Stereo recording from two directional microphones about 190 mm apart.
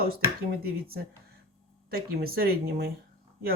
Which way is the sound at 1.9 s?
50° right (ahead or behind).